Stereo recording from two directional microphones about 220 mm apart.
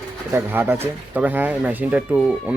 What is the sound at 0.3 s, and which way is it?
Speech, 10° right (ahead or behind).